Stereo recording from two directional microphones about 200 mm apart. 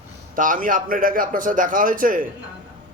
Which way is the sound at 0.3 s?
40° right (ahead or behind).